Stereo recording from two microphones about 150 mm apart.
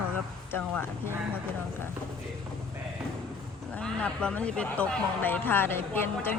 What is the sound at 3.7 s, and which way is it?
Speech, 5° left (ahead or behind).